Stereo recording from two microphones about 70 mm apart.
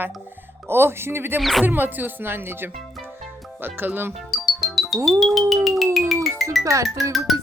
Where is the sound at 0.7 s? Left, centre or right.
Right.